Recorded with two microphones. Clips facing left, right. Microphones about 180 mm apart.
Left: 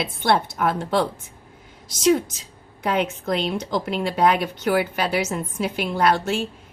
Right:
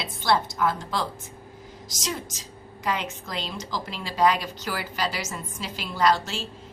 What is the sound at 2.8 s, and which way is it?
A woman's voice, 60° left (ahead or behind).